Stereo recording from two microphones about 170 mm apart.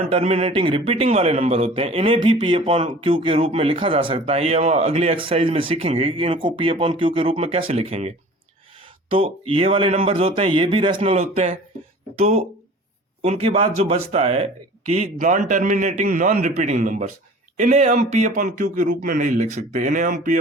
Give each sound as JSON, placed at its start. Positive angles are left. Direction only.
{"t": 0.1, "sound": "a man's voice", "side_deg": -35}